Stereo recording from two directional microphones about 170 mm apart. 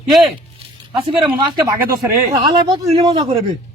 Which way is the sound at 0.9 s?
30° right (ahead or behind).